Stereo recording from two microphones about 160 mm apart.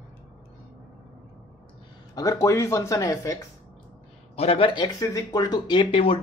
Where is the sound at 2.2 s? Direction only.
20° left (ahead or behind).